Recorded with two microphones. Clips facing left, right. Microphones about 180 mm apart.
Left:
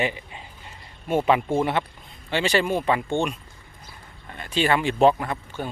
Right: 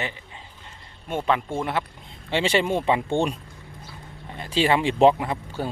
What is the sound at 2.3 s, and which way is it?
Speech, 25° right (ahead or behind).